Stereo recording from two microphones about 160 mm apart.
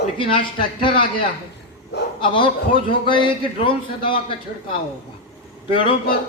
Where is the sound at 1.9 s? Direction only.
90° left.